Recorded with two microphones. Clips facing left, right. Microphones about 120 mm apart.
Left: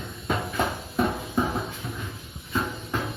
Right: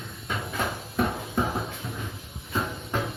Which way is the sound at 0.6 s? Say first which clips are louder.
Left 3 dB; 25° left (ahead or behind).